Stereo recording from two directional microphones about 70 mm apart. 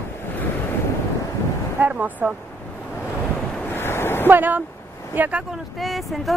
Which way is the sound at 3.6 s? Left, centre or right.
Left.